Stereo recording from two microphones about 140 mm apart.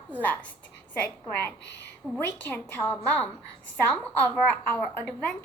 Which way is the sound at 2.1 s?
10° left (ahead or behind).